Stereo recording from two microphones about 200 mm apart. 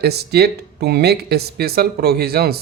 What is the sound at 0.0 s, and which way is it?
Speech, 55° right (ahead or behind).